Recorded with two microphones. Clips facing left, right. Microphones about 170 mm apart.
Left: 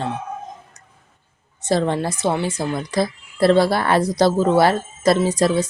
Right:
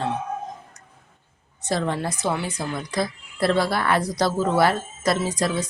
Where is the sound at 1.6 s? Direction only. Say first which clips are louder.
Left 5 dB; 30° left (ahead or behind).